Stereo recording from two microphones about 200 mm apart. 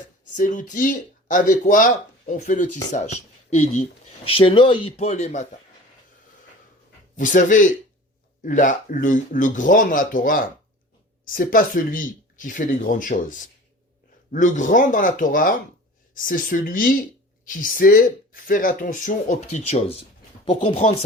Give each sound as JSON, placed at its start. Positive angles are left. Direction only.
{"t": 0.3, "sound": "speech", "side_deg": 40}
{"t": 4.9, "sound": "speech", "side_deg": 35}
{"t": 7.2, "sound": "speech", "side_deg": 40}